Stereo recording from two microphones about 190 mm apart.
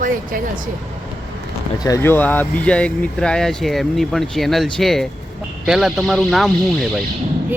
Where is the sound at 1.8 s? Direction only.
15° left (ahead or behind).